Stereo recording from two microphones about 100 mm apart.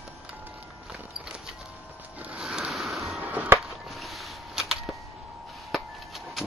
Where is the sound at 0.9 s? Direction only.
5° right (ahead or behind).